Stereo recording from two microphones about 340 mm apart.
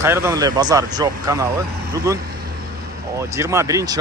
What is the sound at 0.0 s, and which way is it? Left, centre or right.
Speech, centre.